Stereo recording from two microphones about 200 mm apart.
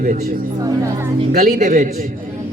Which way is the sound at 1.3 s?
40° right (ahead or behind).